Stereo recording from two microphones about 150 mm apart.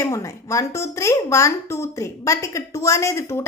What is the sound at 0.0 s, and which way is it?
A woman's voice, 20° left (ahead or behind).